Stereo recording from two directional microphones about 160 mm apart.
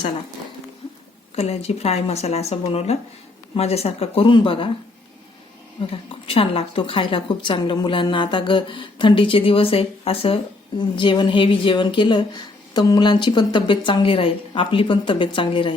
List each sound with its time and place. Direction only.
1.4 s a woman's voice: 40° left (ahead or behind)
5.8 s a woman's voice: 30° left (ahead or behind)